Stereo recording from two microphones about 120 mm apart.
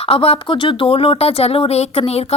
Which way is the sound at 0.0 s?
55° left (ahead or behind).